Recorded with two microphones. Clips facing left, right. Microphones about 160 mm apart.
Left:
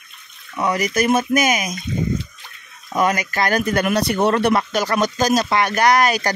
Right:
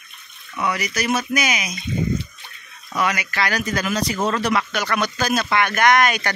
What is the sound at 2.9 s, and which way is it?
Speech, 45° left (ahead or behind).